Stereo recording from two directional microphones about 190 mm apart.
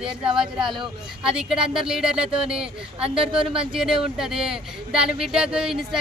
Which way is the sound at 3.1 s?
30° right (ahead or behind).